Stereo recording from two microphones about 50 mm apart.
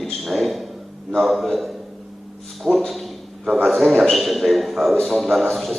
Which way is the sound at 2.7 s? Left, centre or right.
Centre.